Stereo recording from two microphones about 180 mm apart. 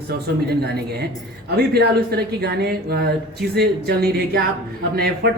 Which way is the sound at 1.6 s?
60° right (ahead or behind).